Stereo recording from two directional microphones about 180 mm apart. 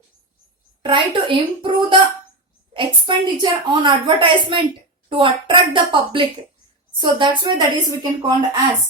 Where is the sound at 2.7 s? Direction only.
25° right (ahead or behind).